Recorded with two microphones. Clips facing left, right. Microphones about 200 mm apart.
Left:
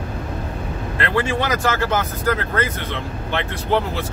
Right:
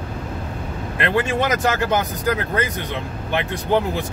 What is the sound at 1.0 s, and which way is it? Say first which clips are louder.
Speech: right 1 dB; 20° right (ahead or behind).